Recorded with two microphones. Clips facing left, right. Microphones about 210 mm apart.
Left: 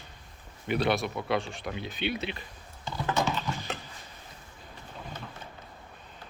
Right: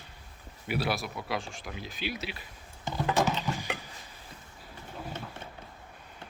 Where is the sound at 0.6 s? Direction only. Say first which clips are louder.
Left 4 dB; 5° right (ahead or behind).